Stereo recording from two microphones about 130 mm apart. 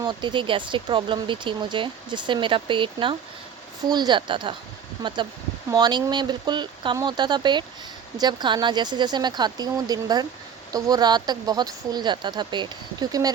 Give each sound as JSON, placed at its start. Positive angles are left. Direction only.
{"t": 0.0, "sound": "speech", "side_deg": -35}
{"t": 5.7, "sound": "speech", "side_deg": -35}